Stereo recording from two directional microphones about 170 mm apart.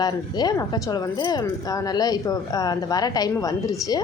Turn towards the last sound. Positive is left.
turn(degrees=20)  # may be behind; listen again after turning